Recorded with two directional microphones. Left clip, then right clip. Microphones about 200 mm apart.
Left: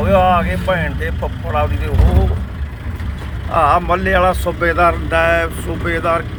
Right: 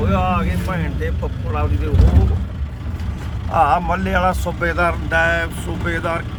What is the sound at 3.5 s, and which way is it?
Speech, 10° right (ahead or behind).